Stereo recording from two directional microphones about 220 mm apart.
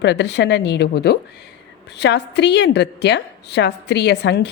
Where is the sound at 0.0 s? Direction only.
50° left (ahead or behind).